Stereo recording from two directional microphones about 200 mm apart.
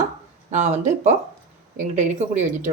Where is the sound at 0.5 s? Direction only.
35° right (ahead or behind).